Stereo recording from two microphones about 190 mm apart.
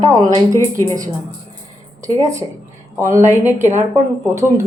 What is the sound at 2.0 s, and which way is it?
A woman's voice, 15° right (ahead or behind).